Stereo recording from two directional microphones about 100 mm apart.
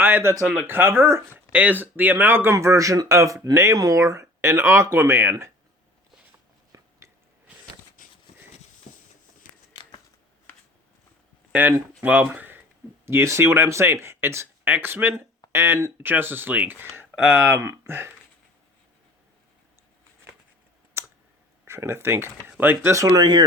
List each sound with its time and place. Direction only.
0.0 s speech: 25° right (ahead or behind)
6.7 s biting: 35° right (ahead or behind)
12.0 s speech: 15° right (ahead or behind)
21.6 s speech: 25° right (ahead or behind); by 23.4 s 45° right (ahead or behind)